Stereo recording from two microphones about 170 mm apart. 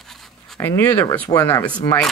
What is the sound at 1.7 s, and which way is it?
Speech, 5° left (ahead or behind).